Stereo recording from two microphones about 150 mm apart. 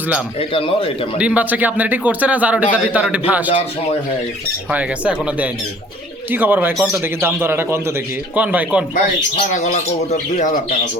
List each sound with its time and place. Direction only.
0.3 s a man's voice: 40° left (ahead or behind)
1.2 s speech: 10° right (ahead or behind)
4.7 s speech: 10° right (ahead or behind)
9.5 s speech: 55° left (ahead or behind)